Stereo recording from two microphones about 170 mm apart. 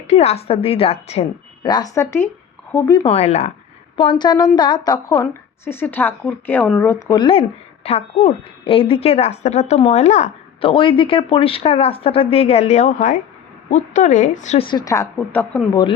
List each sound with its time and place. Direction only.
0.1 s a woman's voice: 40° left (ahead or behind)
1.6 s a woman's voice: 25° left (ahead or behind)
3.1 s a woman's voice: 40° left (ahead or behind)
3.9 s a woman's voice: 30° left (ahead or behind); by 7.2 s 15° left (ahead or behind)
7.2 s a woman's voice: 35° left (ahead or behind)
14.7 s speech: 20° left (ahead or behind)